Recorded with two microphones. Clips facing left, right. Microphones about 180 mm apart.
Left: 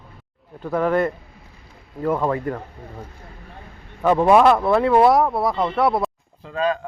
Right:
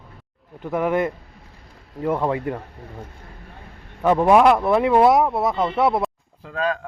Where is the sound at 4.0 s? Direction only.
10° right (ahead or behind).